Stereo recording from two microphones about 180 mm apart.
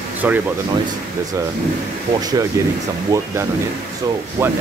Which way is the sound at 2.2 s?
20° right (ahead or behind).